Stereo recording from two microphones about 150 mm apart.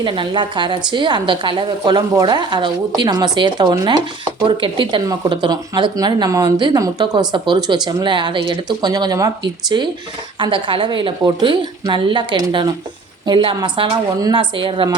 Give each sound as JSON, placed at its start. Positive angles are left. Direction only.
{"t": 0.0, "sound": "a woman's voice", "side_deg": -30}